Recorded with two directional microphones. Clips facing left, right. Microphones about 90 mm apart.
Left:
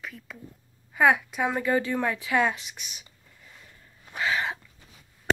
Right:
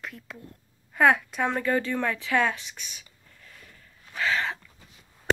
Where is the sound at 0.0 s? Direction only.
Centre (ahead or behind); by 4.6 s 15° left (ahead or behind).